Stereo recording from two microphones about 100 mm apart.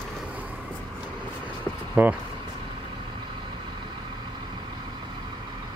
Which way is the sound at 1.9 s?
10° right (ahead or behind).